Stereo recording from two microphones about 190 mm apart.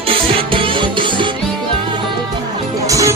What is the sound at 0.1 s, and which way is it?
Music, 30° right (ahead or behind).